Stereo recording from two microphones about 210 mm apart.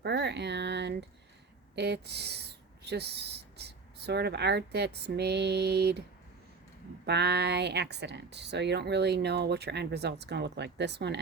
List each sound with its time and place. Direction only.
0.0 s speech: 55° right (ahead or behind)
7.0 s speech: 50° right (ahead or behind)